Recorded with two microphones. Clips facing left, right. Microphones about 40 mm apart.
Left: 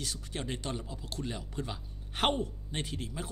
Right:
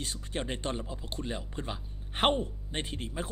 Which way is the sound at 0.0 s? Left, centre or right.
Right.